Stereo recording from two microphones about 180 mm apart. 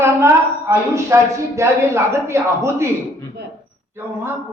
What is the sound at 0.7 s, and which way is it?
Speech, 15° right (ahead or behind).